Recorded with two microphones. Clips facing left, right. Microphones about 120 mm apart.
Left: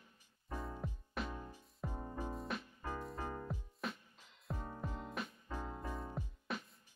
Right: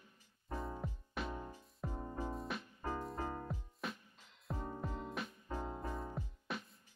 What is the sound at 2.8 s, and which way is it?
Music, 25° right (ahead or behind).